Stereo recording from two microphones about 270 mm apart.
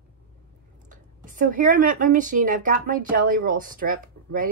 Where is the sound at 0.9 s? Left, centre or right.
Right.